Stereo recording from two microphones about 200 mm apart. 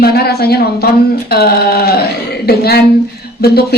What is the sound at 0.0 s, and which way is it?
A woman's voice, 50° left (ahead or behind).